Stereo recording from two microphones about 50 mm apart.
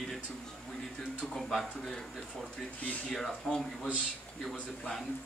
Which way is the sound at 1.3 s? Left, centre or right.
Centre.